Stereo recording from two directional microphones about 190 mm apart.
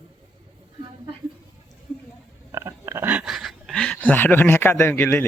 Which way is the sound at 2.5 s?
15° right (ahead or behind).